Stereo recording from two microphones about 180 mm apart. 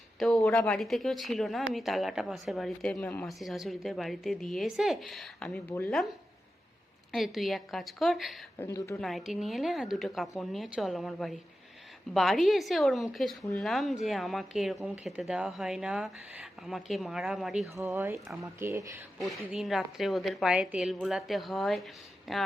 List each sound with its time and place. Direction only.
0.2 s speech: centre (ahead or behind)
8.5 s a woman's voice: 15° left (ahead or behind)
9.0 s speech: centre (ahead or behind)
17.7 s speech: 15° right (ahead or behind)
19.2 s speech: centre (ahead or behind)